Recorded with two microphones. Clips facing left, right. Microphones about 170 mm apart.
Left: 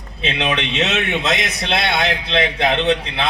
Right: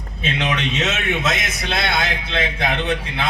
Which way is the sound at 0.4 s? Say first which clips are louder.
Left 2 dB; 65° left (ahead or behind).